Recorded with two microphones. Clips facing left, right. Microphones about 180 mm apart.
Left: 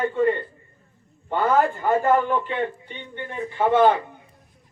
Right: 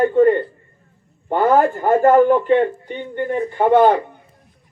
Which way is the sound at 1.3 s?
45° right (ahead or behind).